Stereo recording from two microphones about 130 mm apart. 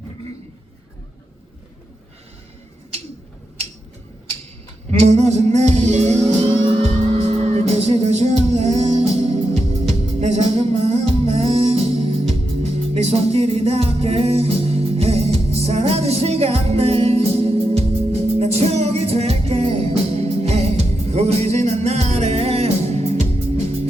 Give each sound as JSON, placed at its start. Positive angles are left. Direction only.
{"t": 4.9, "sound": "music", "side_deg": -55}